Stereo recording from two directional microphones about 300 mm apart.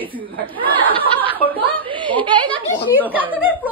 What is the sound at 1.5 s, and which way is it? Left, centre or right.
Speech, centre.